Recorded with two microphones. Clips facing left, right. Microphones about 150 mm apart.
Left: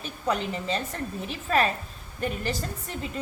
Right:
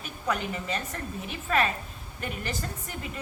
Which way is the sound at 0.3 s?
30° left (ahead or behind).